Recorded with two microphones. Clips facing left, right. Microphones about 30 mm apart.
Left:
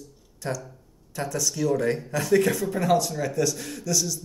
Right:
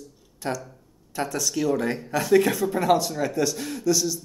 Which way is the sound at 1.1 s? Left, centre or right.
Centre.